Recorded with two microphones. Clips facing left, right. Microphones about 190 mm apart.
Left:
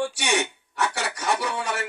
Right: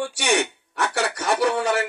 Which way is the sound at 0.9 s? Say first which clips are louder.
Right 4 dB; 60° right (ahead or behind).